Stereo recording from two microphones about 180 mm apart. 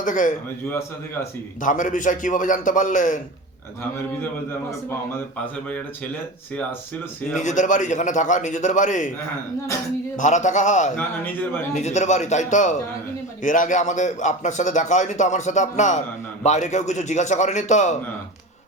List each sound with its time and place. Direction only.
0.0 s a man's voice: 45° left (ahead or behind)
1.6 s a man's voice: 45° left (ahead or behind)
7.4 s a man's voice: 45° left (ahead or behind)
10.2 s a man's voice: 40° left (ahead or behind)
10.9 s a man's voice: 10° left (ahead or behind)
11.7 s a man's voice: 40° left (ahead or behind)